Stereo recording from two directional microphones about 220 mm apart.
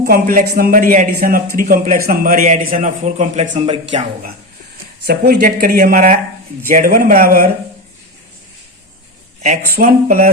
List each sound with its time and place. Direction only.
0.0 s a man's voice: 40° right (ahead or behind)
5.0 s a man's voice: 40° right (ahead or behind)
9.7 s a man's voice: 40° right (ahead or behind)